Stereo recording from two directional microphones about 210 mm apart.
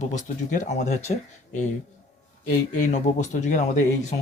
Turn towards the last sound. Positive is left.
turn(degrees=35)  # may be behind; listen again after turning